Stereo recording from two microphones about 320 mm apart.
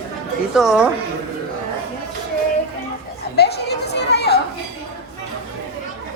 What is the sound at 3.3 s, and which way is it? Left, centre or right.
Chatter, left.